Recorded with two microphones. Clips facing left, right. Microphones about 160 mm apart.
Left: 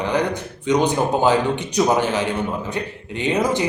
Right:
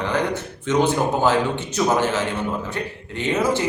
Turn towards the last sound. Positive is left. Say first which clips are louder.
# left 1 dB
turn(degrees=15)  # may be behind; listen again after turning